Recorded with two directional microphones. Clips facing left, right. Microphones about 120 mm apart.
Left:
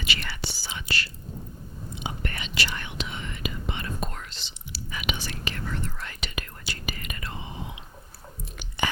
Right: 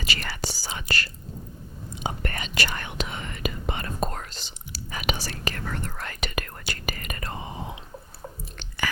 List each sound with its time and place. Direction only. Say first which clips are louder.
0.0 s whispering: right 2 dB; 40° right (ahead or behind)
5.6 s whispering: right 1 dB; 55° right (ahead or behind)
8.6 s chewing: left 1 dB; 10° left (ahead or behind)